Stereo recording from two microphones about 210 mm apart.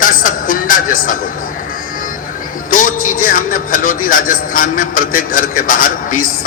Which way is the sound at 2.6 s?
40° left (ahead or behind).